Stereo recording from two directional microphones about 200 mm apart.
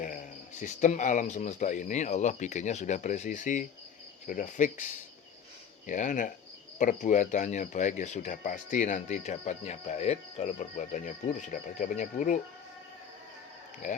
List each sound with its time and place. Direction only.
0.6 s speech: 40° left (ahead or behind)